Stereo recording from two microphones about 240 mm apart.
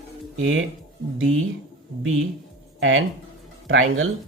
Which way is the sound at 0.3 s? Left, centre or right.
Right.